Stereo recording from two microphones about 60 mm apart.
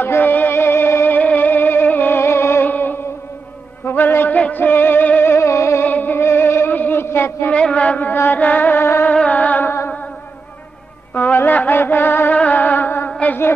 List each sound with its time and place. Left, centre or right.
0.0 s music: left
1.0 s music: left
2.6 s music: left
3.8 s a sound: left
4.4 s music: left
5.3 s music: left
5.9 s music: left
6.2 s music: left
7.5 s a sound: left
8.1 s music: left
9.1 s music: left
11.1 s music: left
12.4 s music: left